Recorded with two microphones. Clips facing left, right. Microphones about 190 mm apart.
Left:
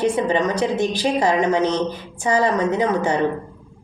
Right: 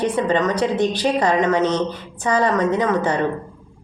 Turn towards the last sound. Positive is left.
turn(degrees=10)  # may be behind; listen again after turning